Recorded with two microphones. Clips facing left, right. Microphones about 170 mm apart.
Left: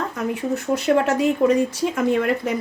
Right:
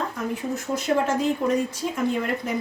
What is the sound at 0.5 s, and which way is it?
Speech, 70° left (ahead or behind).